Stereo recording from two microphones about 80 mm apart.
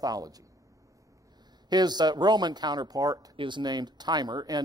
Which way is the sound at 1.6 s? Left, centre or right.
Right.